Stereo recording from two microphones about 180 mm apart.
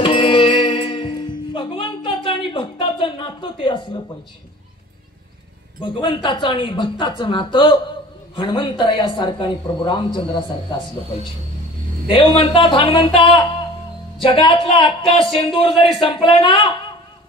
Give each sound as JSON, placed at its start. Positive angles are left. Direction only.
{"t": 0.0, "sound": "music", "side_deg": 30}
{"t": 5.8, "sound": "a man's voice", "side_deg": 25}
{"t": 12.1, "sound": "a man's voice", "side_deg": 30}